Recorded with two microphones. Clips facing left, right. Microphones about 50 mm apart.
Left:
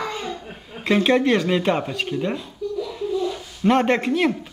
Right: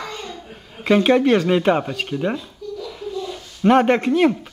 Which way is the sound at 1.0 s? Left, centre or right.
Centre.